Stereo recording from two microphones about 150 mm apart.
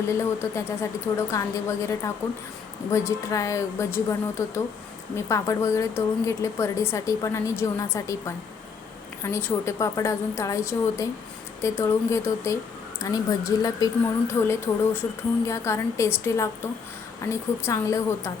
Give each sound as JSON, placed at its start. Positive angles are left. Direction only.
{"t": 0.1, "sound": "a woman's voice", "side_deg": 20}
{"t": 9.2, "sound": "a woman's voice", "side_deg": 15}